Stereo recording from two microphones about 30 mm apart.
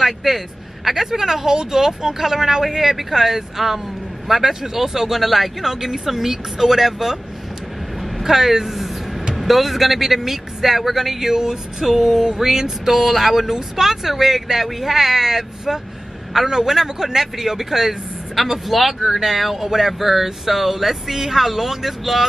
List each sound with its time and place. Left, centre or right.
0.0 s speech: centre
8.0 s vehicle: centre
9.3 s speech: centre
12.9 s speech: centre